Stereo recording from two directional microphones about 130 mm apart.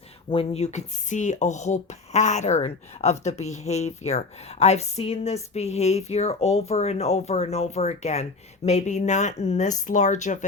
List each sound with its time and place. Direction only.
0.3 s speech: 50° left (ahead or behind); by 10.4 s 70° left (ahead or behind)